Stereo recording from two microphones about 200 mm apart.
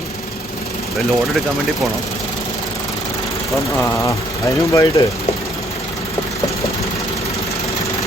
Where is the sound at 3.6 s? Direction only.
15° left (ahead or behind).